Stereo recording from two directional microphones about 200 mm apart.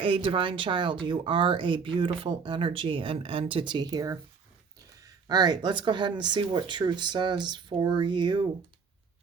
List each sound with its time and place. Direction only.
0.0 s speech: 25° right (ahead or behind)